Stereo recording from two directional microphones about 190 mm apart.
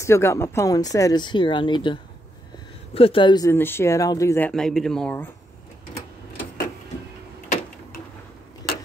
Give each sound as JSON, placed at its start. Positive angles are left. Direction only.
{"t": 0.0, "sound": "speech", "side_deg": 15}
{"t": 4.5, "sound": "speech", "side_deg": 5}